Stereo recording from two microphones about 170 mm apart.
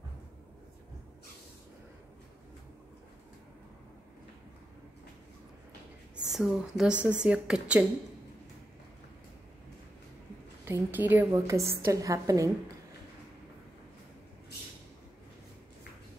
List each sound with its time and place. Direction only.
6.2 s a woman's voice: centre (ahead or behind)
10.6 s a woman's voice: 15° right (ahead or behind)